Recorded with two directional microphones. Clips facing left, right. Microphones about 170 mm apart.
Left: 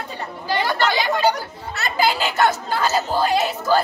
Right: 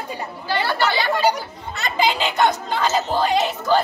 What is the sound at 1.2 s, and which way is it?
Speech, 10° right (ahead or behind).